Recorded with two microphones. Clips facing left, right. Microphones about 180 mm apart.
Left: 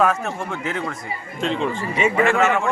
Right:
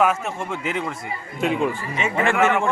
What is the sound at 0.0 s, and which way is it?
Speech, 10° right (ahead or behind).